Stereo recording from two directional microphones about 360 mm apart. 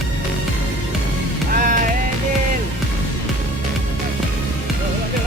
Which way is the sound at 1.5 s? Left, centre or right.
Right.